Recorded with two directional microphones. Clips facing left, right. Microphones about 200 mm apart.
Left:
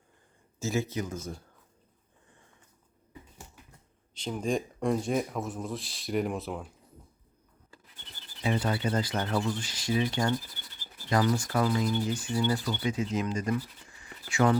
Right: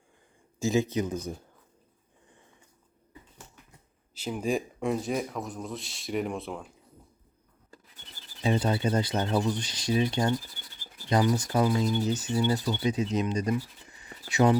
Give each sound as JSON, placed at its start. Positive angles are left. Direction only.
{"t": 0.6, "sound": "speech", "side_deg": -15}
{"t": 4.1, "sound": "speech", "side_deg": -5}
{"t": 8.4, "sound": "speech", "side_deg": -25}